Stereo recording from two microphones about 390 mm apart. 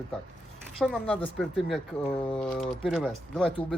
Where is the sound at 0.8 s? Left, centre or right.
Centre.